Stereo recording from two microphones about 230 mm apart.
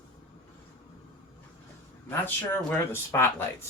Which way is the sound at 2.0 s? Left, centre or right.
Centre.